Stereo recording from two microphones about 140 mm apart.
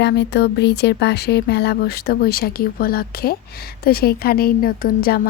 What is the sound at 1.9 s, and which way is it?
A woman's voice, 90° left.